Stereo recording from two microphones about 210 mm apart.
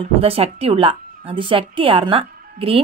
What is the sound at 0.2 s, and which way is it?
A woman's voice, 25° right (ahead or behind).